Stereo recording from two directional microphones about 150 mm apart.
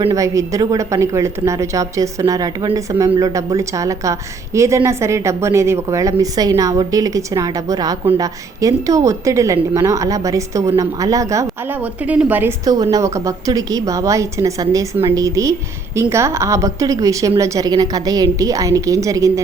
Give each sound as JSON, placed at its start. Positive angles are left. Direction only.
{"t": 0.1, "sound": "a woman's voice", "side_deg": -20}
{"t": 11.8, "sound": "a woman's voice", "side_deg": -10}